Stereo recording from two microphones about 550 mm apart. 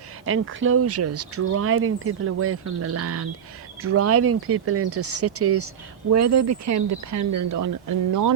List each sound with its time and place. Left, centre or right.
0.3 s speech: right